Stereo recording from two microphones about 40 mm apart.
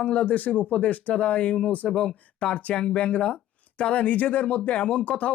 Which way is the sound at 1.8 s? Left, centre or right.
Centre.